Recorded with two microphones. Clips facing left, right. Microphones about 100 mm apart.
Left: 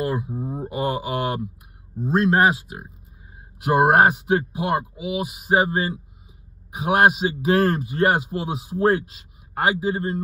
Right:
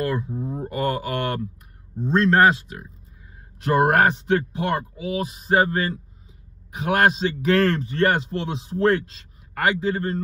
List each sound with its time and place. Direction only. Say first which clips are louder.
0.0 s speech: even; 15° left (ahead or behind)